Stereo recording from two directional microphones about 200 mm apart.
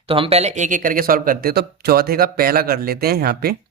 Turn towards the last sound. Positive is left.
turn(degrees=-50)  # may be behind; listen again after turning